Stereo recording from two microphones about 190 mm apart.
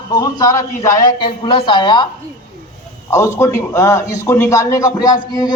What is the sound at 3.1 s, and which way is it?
A man's voice, 15° left (ahead or behind).